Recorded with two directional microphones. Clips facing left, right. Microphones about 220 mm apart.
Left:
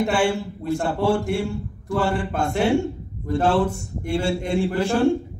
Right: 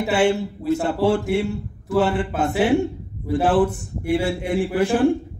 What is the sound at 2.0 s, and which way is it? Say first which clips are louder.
Speech: right 4 dB; 20° right (ahead or behind).